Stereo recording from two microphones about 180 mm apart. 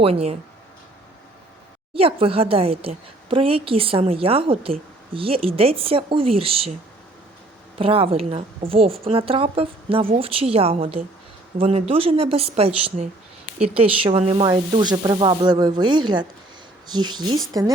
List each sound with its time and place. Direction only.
0.0 s a woman's voice: 35° right (ahead or behind)
2.0 s a woman's voice: 30° right (ahead or behind)
7.8 s a woman's voice: 30° right (ahead or behind)